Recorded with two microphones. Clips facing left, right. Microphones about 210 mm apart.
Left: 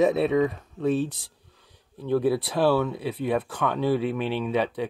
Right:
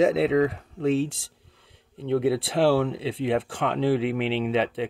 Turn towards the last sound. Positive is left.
turn(degrees=-25)  # may be behind; listen again after turning